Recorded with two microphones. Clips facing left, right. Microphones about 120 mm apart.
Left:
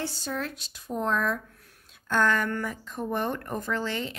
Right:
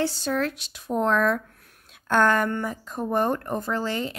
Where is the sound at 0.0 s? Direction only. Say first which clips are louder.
Right 7 dB; 85° right.